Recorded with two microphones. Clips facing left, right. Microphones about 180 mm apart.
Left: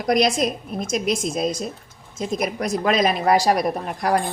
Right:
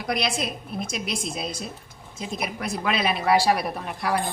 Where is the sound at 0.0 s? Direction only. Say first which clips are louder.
Left 8 dB; 45° left (ahead or behind).